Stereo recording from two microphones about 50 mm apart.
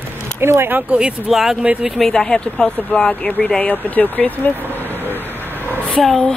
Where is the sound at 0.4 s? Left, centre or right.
Right.